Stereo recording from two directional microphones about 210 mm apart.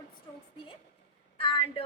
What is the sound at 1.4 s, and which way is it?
Speech, 25° left (ahead or behind).